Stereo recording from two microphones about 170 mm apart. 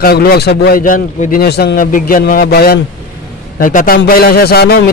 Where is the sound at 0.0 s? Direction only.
65° left (ahead or behind).